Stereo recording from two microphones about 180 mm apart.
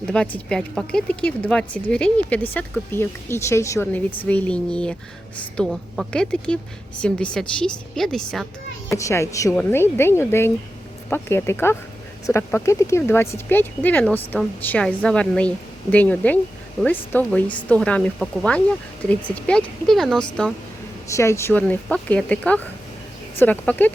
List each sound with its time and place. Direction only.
0.3 s a woman's voice: 5° left (ahead or behind)
8.9 s a woman's voice: 15° left (ahead or behind); by 20.2 s centre (ahead or behind)
21.1 s speech: 15° left (ahead or behind)